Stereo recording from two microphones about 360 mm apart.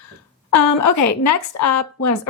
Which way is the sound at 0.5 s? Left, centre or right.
Left.